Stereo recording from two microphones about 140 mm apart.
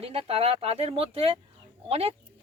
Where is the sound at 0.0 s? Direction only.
45° right (ahead or behind).